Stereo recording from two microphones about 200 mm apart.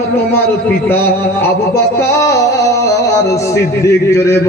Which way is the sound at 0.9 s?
10° left (ahead or behind).